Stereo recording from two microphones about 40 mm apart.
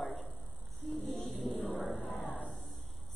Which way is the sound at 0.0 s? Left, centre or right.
Centre.